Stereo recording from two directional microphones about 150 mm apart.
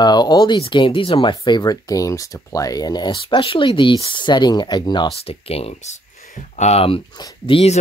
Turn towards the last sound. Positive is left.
turn(degrees=40)  # may be behind; listen again after turning